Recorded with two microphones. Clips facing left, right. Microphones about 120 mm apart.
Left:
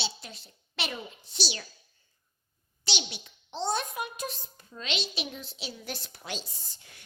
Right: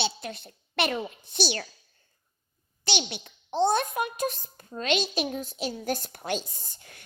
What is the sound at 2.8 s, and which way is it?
A child's voice, 55° right (ahead or behind).